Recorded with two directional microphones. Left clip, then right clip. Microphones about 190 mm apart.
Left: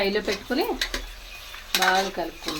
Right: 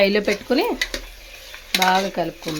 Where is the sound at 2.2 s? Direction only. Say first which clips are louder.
Right 6 dB; 60° right (ahead or behind).